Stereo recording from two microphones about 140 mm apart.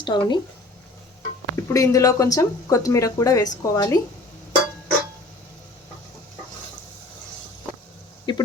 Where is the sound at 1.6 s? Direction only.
25° left (ahead or behind).